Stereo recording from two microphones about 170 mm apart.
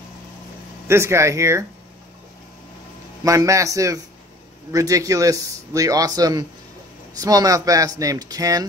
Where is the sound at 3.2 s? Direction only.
20° right (ahead or behind).